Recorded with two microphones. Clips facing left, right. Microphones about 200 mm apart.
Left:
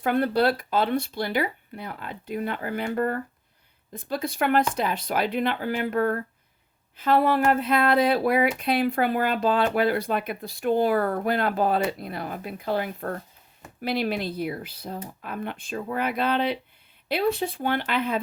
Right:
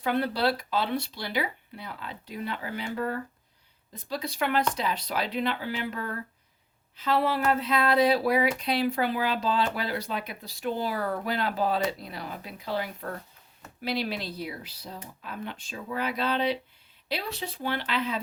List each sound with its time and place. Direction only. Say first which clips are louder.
0.0 s speech: left 4 dB; 50° left (ahead or behind)